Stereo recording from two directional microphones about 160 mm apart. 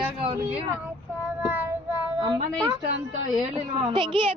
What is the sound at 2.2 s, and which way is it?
A woman's voice, 25° right (ahead or behind).